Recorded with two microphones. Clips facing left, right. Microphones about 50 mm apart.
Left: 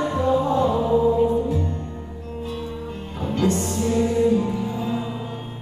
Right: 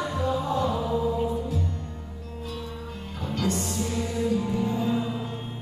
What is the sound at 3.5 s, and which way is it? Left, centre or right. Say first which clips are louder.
Music: left 7 dB; left.